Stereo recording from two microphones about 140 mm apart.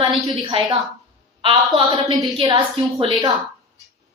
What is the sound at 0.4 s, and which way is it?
A woman's voice, 40° right (ahead or behind).